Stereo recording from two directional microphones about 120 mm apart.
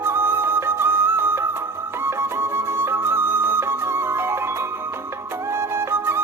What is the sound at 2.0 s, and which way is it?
Music, 20° right (ahead or behind).